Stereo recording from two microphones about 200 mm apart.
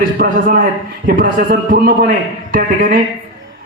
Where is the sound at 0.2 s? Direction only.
45° right (ahead or behind).